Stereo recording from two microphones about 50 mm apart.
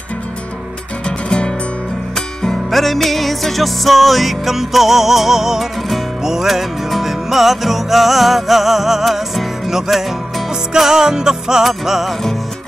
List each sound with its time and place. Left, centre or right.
1.0 s music: centre
2.1 s music: centre